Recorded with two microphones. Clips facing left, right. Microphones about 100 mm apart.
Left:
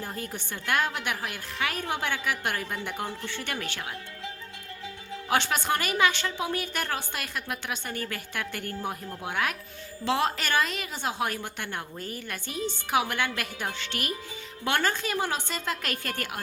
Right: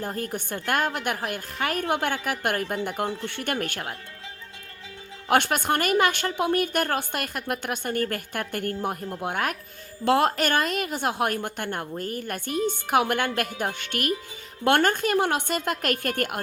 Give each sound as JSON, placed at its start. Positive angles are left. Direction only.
{"t": 0.0, "sound": "a woman's voice", "side_deg": -45}
{"t": 5.3, "sound": "a woman's voice", "side_deg": -55}